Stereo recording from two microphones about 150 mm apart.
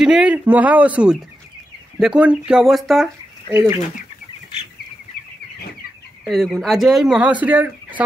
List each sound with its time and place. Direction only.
0.0 s speech: 5° right (ahead or behind)
3.5 s speech: 20° right (ahead or behind)
6.2 s speech: centre (ahead or behind)